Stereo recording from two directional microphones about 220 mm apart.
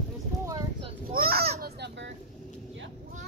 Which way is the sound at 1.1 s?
40° right (ahead or behind).